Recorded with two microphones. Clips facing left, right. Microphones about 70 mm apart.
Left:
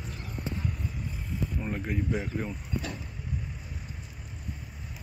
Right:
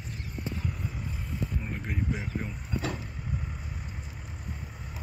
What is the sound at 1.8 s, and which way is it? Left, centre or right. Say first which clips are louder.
Speech: left 2 dB; centre.